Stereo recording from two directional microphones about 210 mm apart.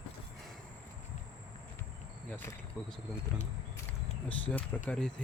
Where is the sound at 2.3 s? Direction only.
10° left (ahead or behind).